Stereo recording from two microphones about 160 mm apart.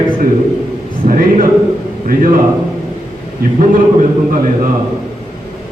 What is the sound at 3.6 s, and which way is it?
Speech, 55° right (ahead or behind).